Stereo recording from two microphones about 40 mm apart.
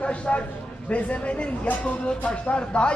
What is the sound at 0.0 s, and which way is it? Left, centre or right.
A man's voice, left.